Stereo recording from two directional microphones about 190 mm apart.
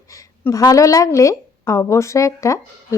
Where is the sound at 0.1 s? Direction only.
15° left (ahead or behind).